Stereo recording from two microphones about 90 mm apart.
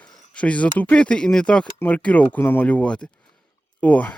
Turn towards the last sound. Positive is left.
turn(degrees=15)  # may be behind; listen again after turning